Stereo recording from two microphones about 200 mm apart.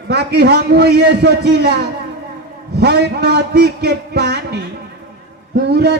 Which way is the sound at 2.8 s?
55° right (ahead or behind).